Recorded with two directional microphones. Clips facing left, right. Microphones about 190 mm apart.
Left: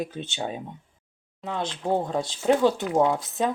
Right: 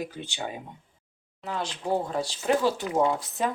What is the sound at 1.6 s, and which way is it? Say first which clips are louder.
Speech: left 2 dB; 25° left (ahead or behind).